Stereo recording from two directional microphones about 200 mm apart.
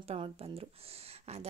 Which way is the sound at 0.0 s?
30° right (ahead or behind).